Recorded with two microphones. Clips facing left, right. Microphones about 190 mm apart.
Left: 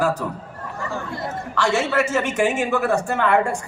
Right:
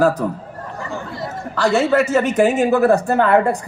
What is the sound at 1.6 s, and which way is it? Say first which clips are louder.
Speech: right 5 dB; 35° right (ahead or behind).